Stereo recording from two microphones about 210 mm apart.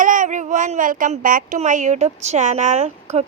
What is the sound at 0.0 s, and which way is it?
Speech, 40° right (ahead or behind).